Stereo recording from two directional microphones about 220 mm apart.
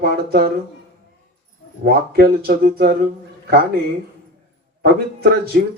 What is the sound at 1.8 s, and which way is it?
Speech, 45° right (ahead or behind).